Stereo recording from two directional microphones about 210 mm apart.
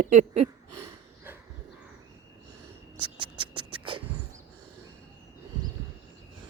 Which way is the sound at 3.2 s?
25° right (ahead or behind).